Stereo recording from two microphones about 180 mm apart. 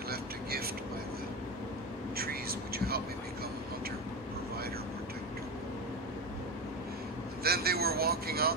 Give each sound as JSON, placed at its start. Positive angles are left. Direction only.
{"t": 0.1, "sound": "vehicle", "side_deg": -60}
{"t": 2.1, "sound": "whispering", "side_deg": -55}
{"t": 7.4, "sound": "vehicle", "side_deg": -60}